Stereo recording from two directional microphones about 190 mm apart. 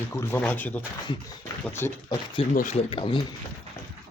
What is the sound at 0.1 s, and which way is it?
Speech, 10° left (ahead or behind).